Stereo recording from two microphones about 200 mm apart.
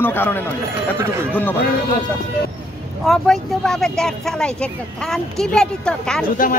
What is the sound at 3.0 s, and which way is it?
Speech, centre (ahead or behind).